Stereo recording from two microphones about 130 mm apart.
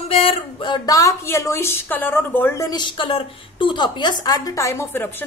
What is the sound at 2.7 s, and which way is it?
A woman's voice, 35° left (ahead or behind).